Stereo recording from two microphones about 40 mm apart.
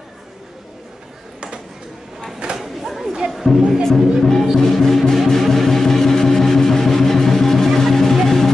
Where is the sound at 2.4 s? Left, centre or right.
Right.